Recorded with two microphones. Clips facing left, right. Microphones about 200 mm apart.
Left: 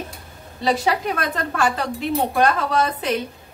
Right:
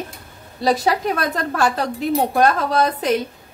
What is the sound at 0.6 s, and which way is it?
A woman's voice, 40° right (ahead or behind).